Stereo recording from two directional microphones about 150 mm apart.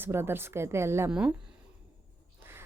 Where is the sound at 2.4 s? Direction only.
15° right (ahead or behind).